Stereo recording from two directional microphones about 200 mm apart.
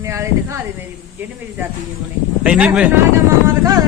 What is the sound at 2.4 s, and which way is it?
Speech, 5° right (ahead or behind).